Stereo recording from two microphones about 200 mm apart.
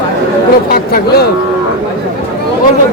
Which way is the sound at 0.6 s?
50° left (ahead or behind).